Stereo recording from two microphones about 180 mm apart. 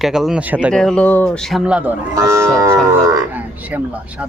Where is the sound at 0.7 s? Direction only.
5° left (ahead or behind).